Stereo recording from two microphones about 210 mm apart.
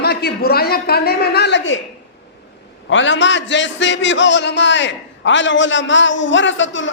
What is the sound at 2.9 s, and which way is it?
A man's voice, 60° left (ahead or behind).